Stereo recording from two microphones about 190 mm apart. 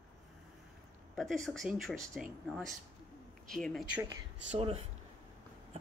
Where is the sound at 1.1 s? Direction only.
Centre (ahead or behind).